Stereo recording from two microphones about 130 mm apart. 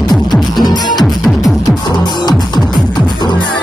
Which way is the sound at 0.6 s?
30° left (ahead or behind).